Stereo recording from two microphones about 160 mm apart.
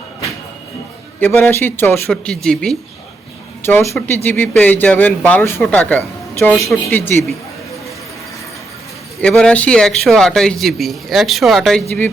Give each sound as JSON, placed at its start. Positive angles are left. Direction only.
{"t": 1.2, "sound": "speech", "side_deg": 15}
{"t": 2.0, "sound": "a man's voice", "side_deg": 0}
{"t": 3.6, "sound": "speech", "side_deg": 15}
{"t": 9.2, "sound": "a man's voice", "side_deg": 5}